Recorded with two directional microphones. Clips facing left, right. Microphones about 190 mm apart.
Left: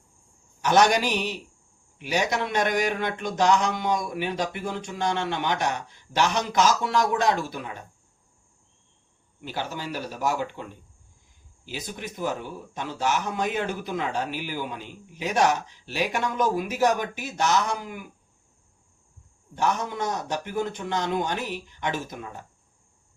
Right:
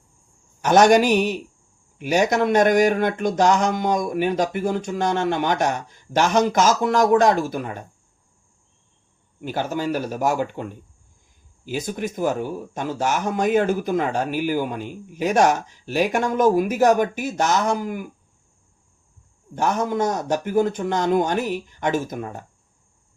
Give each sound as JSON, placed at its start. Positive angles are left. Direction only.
{"t": 0.6, "sound": "speech", "side_deg": -45}
{"t": 9.4, "sound": "speech", "side_deg": -50}
{"t": 19.5, "sound": "speech", "side_deg": -45}